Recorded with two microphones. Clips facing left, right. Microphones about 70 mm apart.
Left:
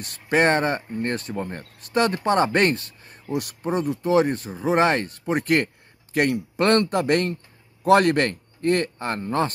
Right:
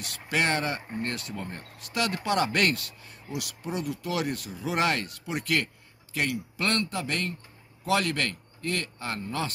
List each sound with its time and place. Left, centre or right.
0.0 s speech: left
1.3 s speech: left
1.8 s a man's voice: left